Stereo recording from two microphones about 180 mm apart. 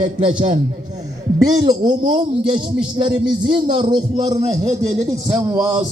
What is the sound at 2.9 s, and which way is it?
A man's voice, 25° right (ahead or behind).